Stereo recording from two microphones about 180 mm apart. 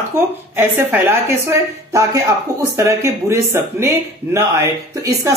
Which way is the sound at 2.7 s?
15° right (ahead or behind).